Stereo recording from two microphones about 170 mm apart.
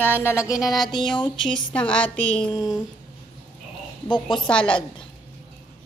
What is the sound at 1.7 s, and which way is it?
Music, 5° left (ahead or behind).